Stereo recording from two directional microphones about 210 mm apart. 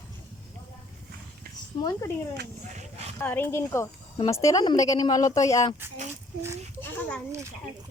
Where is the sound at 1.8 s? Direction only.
15° left (ahead or behind).